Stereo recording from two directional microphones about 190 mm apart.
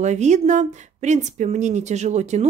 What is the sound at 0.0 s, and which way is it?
Speech, 40° right (ahead or behind).